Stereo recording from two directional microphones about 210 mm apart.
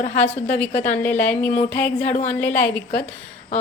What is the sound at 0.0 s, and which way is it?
Speech, 35° left (ahead or behind).